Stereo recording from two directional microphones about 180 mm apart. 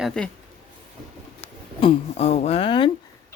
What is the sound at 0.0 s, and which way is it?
Speech, 5° left (ahead or behind).